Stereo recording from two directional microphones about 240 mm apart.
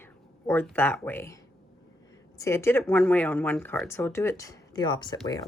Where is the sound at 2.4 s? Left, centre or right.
Centre.